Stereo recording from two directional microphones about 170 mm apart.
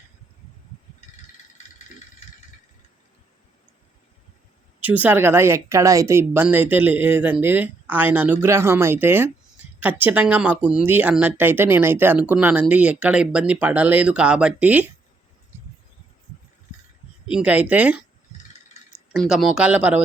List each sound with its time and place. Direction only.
1.0 s a sound: 40° left (ahead or behind)
4.8 s speech: 10° right (ahead or behind)
17.3 s speech: 10° right (ahead or behind)
19.1 s speech: centre (ahead or behind)